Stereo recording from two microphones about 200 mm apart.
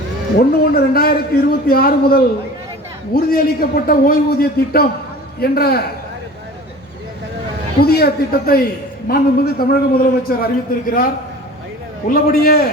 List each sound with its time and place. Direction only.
0.3 s a man's voice: 50° left (ahead or behind)
7.8 s a man's voice: 50° left (ahead or behind)
12.0 s a man's voice: 45° left (ahead or behind)